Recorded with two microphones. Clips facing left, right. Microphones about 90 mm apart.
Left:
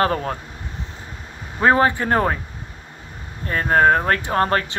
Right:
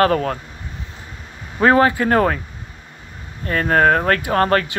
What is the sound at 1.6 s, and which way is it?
Speech, 30° left (ahead or behind).